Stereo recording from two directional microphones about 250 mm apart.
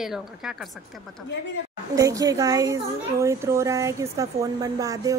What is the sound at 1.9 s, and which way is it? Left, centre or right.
A child's voice, centre.